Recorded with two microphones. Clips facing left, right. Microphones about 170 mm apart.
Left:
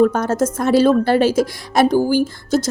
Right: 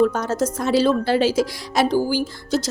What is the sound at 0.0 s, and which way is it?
A woman's voice, 55° left (ahead or behind).